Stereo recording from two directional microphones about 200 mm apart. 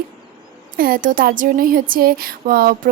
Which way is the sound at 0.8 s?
45° right (ahead or behind).